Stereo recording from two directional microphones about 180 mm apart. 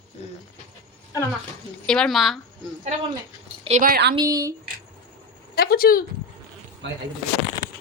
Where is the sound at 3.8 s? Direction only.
60° right (ahead or behind).